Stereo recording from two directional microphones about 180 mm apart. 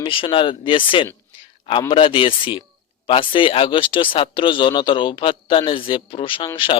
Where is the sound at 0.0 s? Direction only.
30° left (ahead or behind).